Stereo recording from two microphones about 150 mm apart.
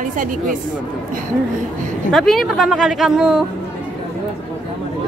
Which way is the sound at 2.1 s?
Centre (ahead or behind).